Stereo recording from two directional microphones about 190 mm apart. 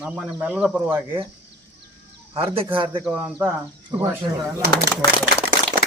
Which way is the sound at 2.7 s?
25° right (ahead or behind).